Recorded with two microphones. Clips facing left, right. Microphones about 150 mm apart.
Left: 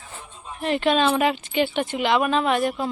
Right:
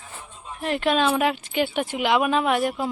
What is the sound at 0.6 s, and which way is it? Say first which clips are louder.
Speech: left 1 dB; centre (ahead or behind).